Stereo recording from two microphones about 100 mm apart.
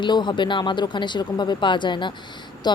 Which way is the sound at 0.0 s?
50° left (ahead or behind).